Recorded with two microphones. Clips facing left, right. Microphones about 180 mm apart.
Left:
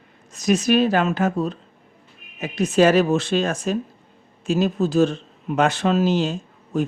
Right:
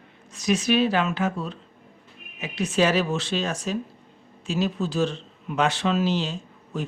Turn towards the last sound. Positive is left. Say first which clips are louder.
# left 8 dB
turn(degrees=45)  # may be behind; listen again after turning